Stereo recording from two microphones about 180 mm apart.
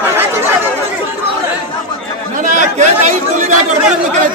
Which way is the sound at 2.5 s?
45° right (ahead or behind).